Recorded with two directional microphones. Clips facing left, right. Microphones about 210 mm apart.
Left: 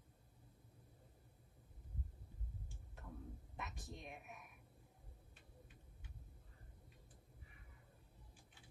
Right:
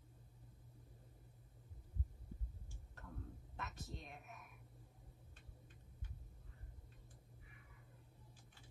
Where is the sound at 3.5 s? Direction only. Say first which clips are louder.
Right 1 dB; 15° left (ahead or behind).